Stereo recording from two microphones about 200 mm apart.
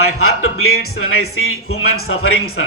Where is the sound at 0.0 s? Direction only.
90° left.